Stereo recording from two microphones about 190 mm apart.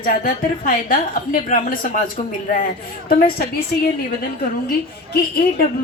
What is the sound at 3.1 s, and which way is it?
Speech, 50° left (ahead or behind).